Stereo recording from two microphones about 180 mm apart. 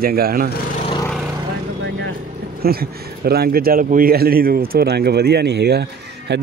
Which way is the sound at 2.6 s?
60° right (ahead or behind).